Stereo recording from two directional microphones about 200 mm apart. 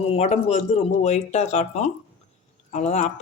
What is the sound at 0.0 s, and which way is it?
Speech, 30° left (ahead or behind).